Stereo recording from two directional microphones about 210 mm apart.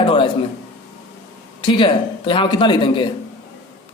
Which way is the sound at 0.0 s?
25° left (ahead or behind).